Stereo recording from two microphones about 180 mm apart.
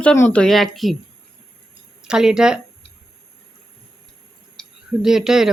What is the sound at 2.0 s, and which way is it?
Speech, 5° right (ahead or behind).